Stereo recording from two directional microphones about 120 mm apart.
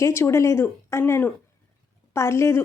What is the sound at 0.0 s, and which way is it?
A woman's voice, 20° left (ahead or behind).